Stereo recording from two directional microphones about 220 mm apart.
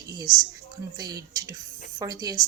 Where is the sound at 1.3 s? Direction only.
15° right (ahead or behind).